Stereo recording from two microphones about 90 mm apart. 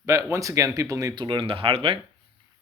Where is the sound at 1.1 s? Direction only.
60° right (ahead or behind); by 2.0 s 90° right.